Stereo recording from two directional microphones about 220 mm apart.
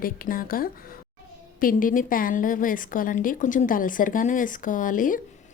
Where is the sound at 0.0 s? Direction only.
40° left (ahead or behind).